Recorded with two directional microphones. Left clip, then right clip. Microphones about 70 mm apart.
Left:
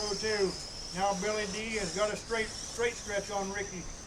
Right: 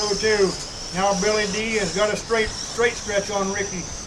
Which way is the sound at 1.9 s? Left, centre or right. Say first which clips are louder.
Right 10 dB; left.